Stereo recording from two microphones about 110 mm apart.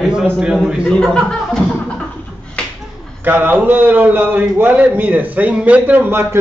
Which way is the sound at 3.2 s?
15° right (ahead or behind).